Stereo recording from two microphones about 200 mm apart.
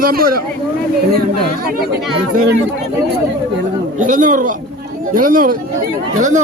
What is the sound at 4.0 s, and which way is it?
A man's voice, 40° right (ahead or behind).